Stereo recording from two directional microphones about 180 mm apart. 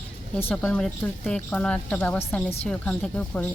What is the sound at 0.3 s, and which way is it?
Speech, 10° left (ahead or behind).